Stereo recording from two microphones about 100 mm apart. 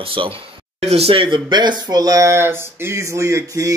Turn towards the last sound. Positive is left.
turn(degrees=-30)  # may be behind; listen again after turning